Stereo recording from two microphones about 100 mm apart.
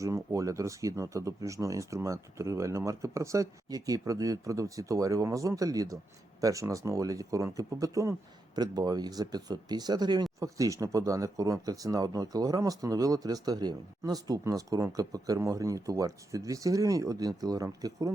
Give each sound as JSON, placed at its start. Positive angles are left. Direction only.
{"t": 0.0, "sound": "speech", "side_deg": -30}
{"t": 10.4, "sound": "speech", "side_deg": -35}